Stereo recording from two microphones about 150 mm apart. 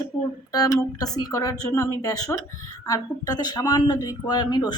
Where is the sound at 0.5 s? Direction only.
25° left (ahead or behind).